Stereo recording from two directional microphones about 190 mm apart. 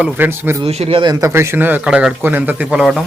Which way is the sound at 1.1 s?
15° right (ahead or behind).